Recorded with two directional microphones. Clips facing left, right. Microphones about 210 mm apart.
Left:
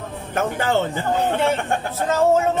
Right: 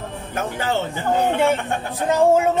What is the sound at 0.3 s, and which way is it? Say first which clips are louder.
Speech: left 3 dB; 50° left (ahead or behind).